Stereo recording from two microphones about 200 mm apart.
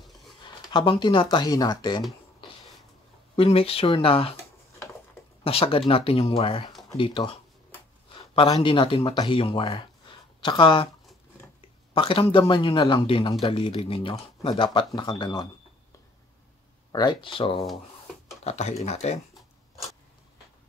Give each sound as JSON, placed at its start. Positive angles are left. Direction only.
{"t": 0.7, "sound": "speech", "side_deg": 25}
{"t": 3.3, "sound": "speech", "side_deg": 30}
{"t": 5.4, "sound": "speech", "side_deg": 30}
{"t": 6.7, "sound": "a sound", "side_deg": 0}
{"t": 7.0, "sound": "speech", "side_deg": 25}
{"t": 11.9, "sound": "speech", "side_deg": 25}
{"t": 16.9, "sound": "speech", "side_deg": 20}